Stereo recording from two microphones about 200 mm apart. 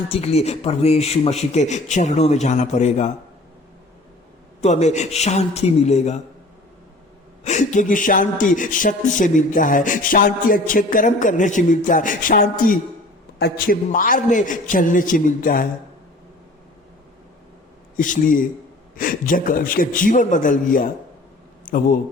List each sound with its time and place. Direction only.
0.1 s speech: 30° left (ahead or behind)
4.6 s speech: 35° left (ahead or behind)
7.4 s a man's voice: 35° left (ahead or behind)
17.9 s a man's voice: 40° left (ahead or behind)